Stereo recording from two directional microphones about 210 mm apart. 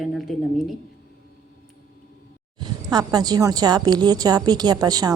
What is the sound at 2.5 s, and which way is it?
A woman's voice, 20° right (ahead or behind).